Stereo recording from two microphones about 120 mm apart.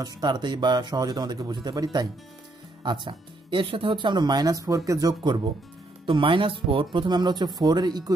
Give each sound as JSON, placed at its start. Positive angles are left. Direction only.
{"t": 0.0, "sound": "speech", "side_deg": -35}